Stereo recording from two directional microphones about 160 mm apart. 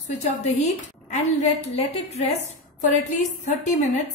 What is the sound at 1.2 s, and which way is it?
A woman's voice, 40° left (ahead or behind).